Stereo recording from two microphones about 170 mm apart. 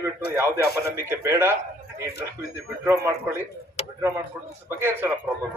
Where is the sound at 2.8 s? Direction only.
15° right (ahead or behind).